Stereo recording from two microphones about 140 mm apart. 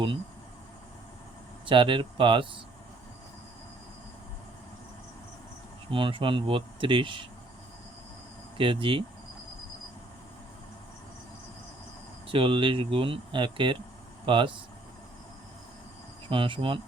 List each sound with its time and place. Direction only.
1.6 s speech: 40° right (ahead or behind)
5.9 s speech: 35° right (ahead or behind)
8.5 s speech: 40° right (ahead or behind)
12.3 s speech: 40° right (ahead or behind)
16.3 s speech: 35° right (ahead or behind)